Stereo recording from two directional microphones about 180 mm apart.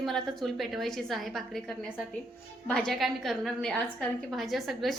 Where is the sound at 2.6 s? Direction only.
5° left (ahead or behind).